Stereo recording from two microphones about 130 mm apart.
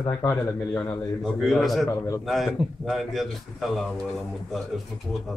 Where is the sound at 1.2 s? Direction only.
Centre (ahead or behind).